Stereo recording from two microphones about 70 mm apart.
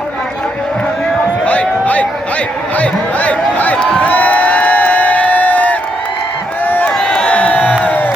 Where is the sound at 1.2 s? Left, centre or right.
Centre.